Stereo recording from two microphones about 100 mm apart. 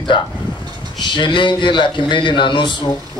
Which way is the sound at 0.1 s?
50° left (ahead or behind).